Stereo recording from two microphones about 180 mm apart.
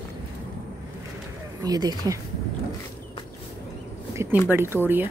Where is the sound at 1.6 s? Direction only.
20° right (ahead or behind).